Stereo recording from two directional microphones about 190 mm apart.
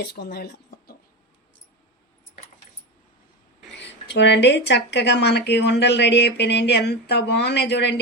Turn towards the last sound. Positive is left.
turn(degrees=65)  # may be behind; listen again after turning